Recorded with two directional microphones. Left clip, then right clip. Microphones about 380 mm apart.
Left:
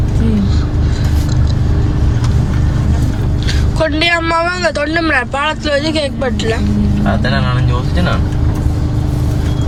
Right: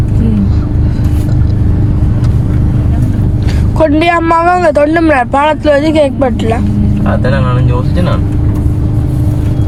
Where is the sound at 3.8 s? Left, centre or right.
Centre.